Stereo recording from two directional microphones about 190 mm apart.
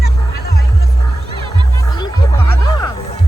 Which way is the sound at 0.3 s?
60° left (ahead or behind).